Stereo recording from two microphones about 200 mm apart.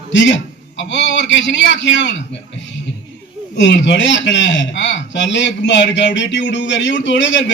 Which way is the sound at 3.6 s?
65° left (ahead or behind).